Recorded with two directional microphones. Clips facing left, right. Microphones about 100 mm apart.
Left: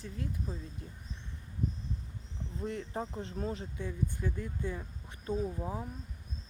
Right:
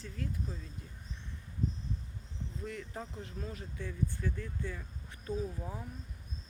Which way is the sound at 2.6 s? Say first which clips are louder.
Left 6 dB; 25° left (ahead or behind).